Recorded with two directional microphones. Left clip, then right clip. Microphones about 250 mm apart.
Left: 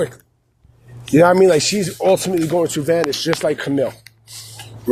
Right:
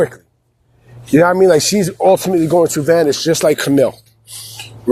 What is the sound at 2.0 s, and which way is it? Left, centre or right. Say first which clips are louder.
Speech: right 4 dB; centre.